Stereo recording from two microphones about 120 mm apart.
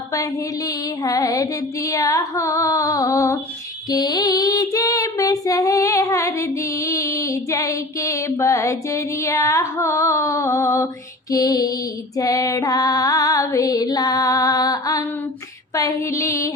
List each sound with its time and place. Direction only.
1.0 s female singing: 30° left (ahead or behind)
11.3 s music: 30° left (ahead or behind)
12.1 s female singing: 30° left (ahead or behind)